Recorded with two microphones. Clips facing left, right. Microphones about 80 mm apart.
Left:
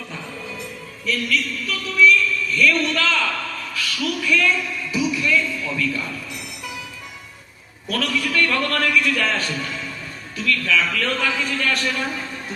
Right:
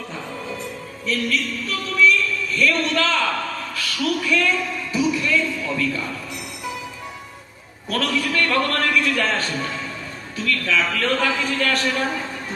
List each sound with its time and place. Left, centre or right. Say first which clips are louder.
1.0 s speech: even; right
7.9 s a man's voice: right 1 dB; right